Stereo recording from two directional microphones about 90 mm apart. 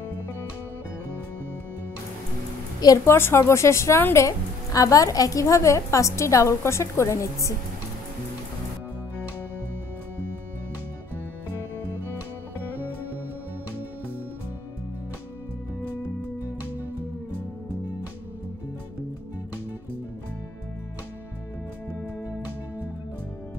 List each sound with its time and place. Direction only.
3.1 s a woman's voice: 30° left (ahead or behind)